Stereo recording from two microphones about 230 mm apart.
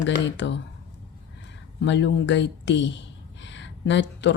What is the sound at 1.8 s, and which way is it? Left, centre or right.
Speech, left.